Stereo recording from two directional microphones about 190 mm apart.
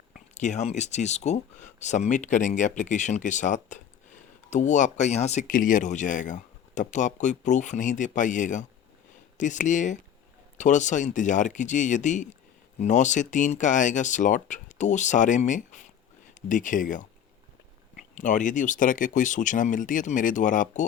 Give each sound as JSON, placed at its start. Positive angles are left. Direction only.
{"t": 0.1, "sound": "speech", "side_deg": 40}